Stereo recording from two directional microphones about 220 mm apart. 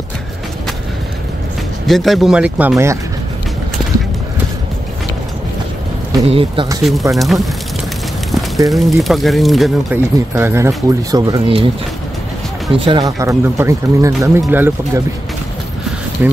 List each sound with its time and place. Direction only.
1.9 s speech: centre (ahead or behind)
6.2 s speech: 25° right (ahead or behind)
6.8 s speech: centre (ahead or behind)
8.6 s speech: centre (ahead or behind)
10.3 s speech: 10° right (ahead or behind)
12.7 s speech: 25° right (ahead or behind)
16.2 s speech: 10° right (ahead or behind)